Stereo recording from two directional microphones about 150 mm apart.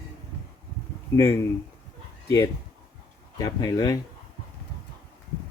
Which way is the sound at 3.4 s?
25° left (ahead or behind).